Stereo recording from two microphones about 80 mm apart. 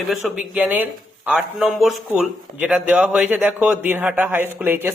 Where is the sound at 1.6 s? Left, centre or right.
Centre.